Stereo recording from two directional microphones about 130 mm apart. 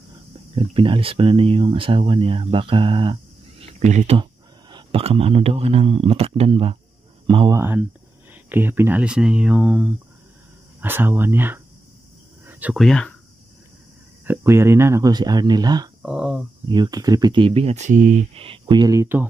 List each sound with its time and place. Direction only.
0.6 s speech: 40° right (ahead or behind)
3.8 s speech: 60° right (ahead or behind)
4.2 s a sound: 35° right (ahead or behind)
5.0 s speech: 50° right (ahead or behind)
7.5 s speech: 20° right (ahead or behind)
12.4 s a sound: 10° right (ahead or behind)
12.7 s speech: 5° left (ahead or behind)
14.2 s speech: 15° right (ahead or behind)
16.0 s speech: 5° right (ahead or behind)
16.6 s speech: 35° right (ahead or behind); by 18.1 s 75° right (ahead or behind)
18.3 s speech: 45° right (ahead or behind); by 19.2 s 20° right (ahead or behind)